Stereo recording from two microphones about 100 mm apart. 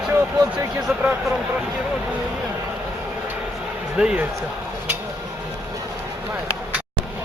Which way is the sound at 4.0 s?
10° right (ahead or behind).